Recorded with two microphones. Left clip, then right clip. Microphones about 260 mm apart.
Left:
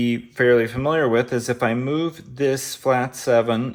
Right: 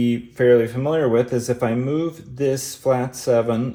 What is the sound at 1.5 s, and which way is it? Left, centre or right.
Speech, left.